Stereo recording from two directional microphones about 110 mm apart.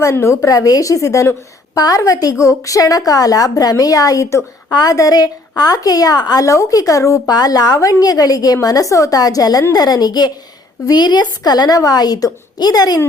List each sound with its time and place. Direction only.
0.0 s a woman's voice: 25° left (ahead or behind)